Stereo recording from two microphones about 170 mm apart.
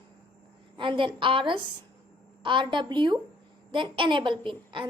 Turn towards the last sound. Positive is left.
turn(degrees=-30)  # may be behind; listen again after turning